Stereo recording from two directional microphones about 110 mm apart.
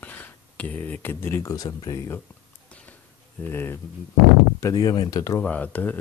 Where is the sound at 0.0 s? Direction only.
15° left (ahead or behind).